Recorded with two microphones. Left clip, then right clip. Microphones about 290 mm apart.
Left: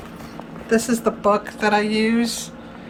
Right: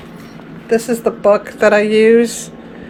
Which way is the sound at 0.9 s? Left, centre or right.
Centre.